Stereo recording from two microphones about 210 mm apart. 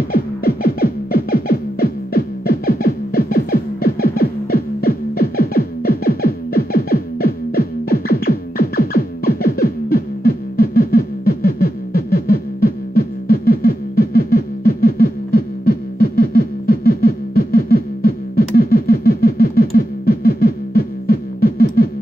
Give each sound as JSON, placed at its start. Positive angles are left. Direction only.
{"t": 0.1, "sound": "music", "side_deg": 45}